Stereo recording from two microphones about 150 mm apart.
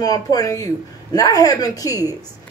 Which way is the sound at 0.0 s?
25° left (ahead or behind).